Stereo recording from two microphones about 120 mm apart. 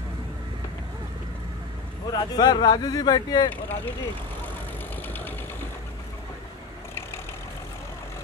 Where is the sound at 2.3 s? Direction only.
35° left (ahead or behind).